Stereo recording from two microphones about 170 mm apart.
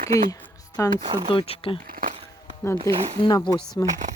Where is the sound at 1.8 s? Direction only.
55° right (ahead or behind).